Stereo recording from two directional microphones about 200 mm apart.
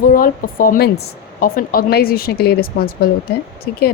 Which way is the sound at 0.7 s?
50° left (ahead or behind).